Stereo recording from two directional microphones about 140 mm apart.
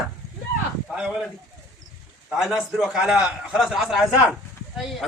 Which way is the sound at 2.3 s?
Centre (ahead or behind).